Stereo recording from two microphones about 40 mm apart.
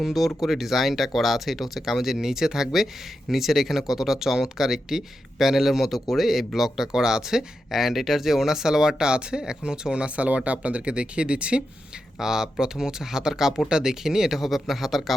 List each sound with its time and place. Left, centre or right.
0.0 s speech: centre; by 10.1 s right
10.2 s speech: right
12.2 s speech: centre